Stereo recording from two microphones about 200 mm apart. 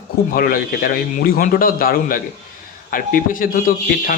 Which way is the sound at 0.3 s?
45° left (ahead or behind).